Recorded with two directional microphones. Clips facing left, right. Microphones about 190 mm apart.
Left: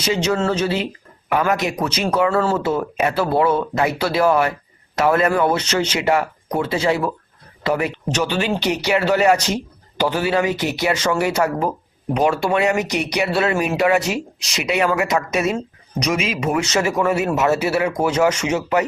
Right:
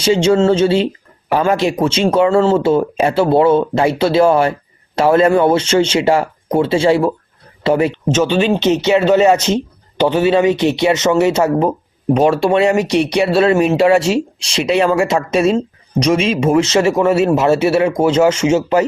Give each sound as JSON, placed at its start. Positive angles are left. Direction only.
{"t": 0.0, "sound": "speech", "side_deg": -30}